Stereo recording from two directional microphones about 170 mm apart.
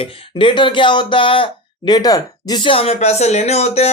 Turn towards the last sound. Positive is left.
turn(degrees=40)  # may be behind; listen again after turning